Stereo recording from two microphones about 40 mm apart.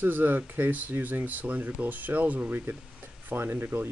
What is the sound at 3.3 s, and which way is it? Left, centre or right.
Speech, right.